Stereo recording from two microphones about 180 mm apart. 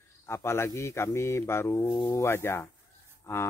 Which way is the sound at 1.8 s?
25° left (ahead or behind).